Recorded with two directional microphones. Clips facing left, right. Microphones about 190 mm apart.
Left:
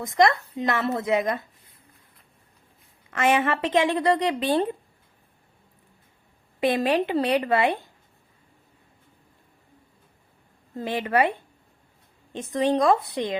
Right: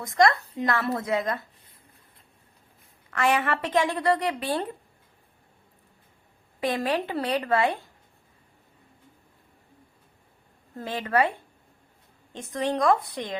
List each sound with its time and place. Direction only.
0.0 s a woman's voice: 20° left (ahead or behind)
3.1 s a woman's voice: 20° left (ahead or behind)
6.7 s a woman's voice: 20° left (ahead or behind)
10.8 s a woman's voice: 20° left (ahead or behind)
12.3 s a woman's voice: 20° left (ahead or behind)